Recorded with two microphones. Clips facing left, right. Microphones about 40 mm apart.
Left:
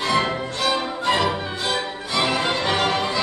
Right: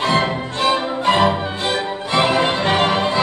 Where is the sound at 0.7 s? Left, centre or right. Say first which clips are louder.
Right 5 dB; right.